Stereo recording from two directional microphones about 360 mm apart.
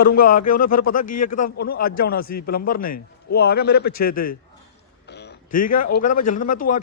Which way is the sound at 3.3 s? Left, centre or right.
Left.